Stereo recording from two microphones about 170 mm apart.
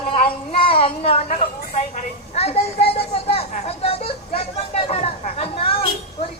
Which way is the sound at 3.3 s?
35° left (ahead or behind).